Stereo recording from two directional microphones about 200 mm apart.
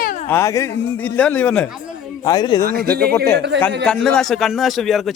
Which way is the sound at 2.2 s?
20° left (ahead or behind).